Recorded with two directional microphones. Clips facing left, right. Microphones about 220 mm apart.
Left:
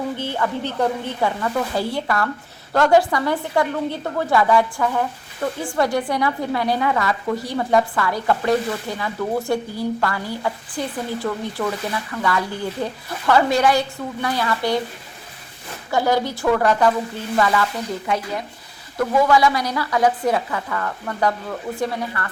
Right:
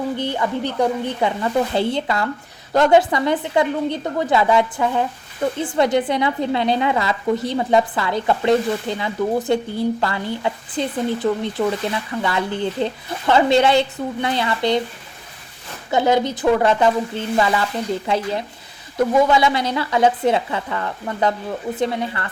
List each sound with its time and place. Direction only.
0.2 s a woman's voice: 15° right (ahead or behind)
15.9 s a woman's voice: 20° right (ahead or behind)